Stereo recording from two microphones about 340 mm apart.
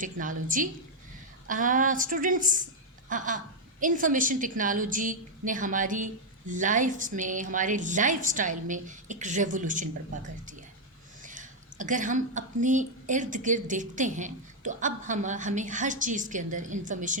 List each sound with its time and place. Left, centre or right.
0.0 s a woman's voice: right